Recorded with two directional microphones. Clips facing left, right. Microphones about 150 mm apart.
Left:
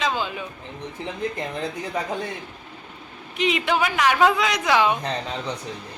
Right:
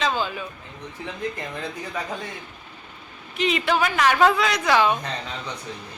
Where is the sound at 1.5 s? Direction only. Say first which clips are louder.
Left 3 dB; 20° left (ahead or behind).